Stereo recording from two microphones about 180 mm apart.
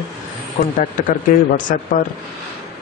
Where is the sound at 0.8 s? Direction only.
50° left (ahead or behind).